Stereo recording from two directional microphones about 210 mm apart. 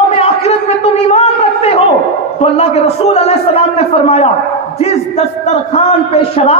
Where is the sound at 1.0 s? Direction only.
30° left (ahead or behind).